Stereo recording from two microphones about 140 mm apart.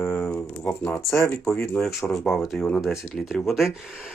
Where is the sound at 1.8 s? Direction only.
Centre (ahead or behind).